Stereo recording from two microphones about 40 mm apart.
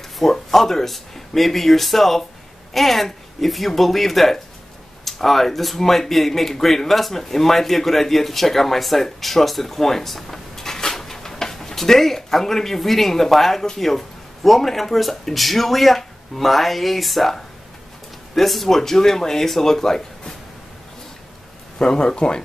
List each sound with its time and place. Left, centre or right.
0.2 s speech: centre
21.7 s speech: centre